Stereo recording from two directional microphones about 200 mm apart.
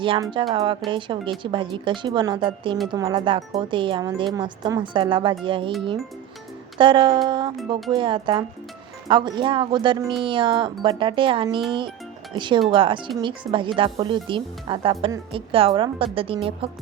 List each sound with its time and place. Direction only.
0.0 s speech: 25° right (ahead or behind)
6.7 s speech: 25° right (ahead or behind)